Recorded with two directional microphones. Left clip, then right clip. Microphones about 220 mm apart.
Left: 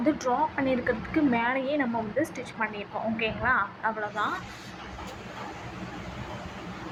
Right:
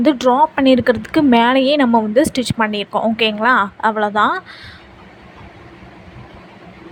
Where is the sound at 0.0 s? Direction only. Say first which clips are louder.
Right 13 dB; 45° right (ahead or behind).